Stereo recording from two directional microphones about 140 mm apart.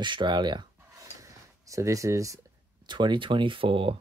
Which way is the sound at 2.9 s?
35° right (ahead or behind).